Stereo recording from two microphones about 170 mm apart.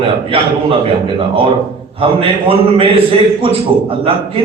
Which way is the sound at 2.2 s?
35° right (ahead or behind).